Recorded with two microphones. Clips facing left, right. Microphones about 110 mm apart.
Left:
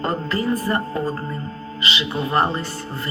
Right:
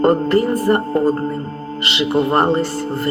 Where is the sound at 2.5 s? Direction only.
60° right (ahead or behind).